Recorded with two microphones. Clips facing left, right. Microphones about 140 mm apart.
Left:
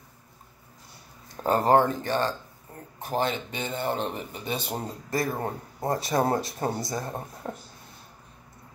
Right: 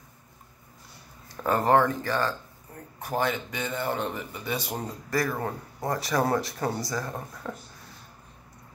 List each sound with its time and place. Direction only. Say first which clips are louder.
1.3 s speech: left 1 dB; 30° left (ahead or behind)